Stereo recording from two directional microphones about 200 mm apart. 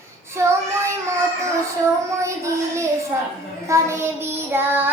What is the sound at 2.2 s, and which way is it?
Child singing, 15° right (ahead or behind).